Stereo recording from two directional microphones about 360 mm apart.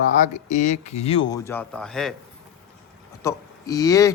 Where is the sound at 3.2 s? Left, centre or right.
Centre.